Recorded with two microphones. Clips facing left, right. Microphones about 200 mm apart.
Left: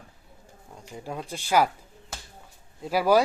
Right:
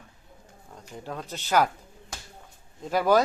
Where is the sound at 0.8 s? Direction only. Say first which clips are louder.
Left 1 dB; 10° left (ahead or behind).